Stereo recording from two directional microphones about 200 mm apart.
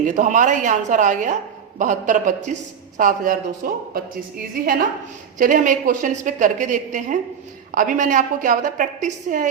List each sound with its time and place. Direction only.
0.0 s a woman's voice: 40° right (ahead or behind)